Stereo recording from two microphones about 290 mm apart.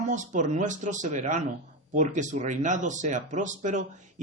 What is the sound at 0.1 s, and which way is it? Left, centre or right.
Speech, right.